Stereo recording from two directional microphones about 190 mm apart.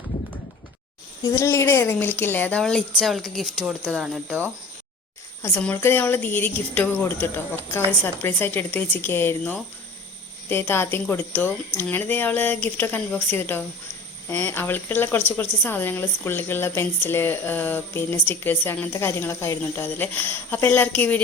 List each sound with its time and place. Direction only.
1.2 s a woman's voice: 15° left (ahead or behind); by 4.4 s centre (ahead or behind)
5.4 s speech: 10° left (ahead or behind)